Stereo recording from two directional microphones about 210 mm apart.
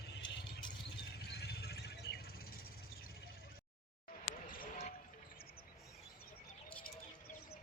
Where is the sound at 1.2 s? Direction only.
50° left (ahead or behind).